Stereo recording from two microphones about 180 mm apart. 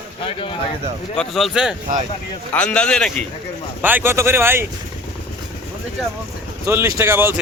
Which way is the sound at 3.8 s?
10° right (ahead or behind).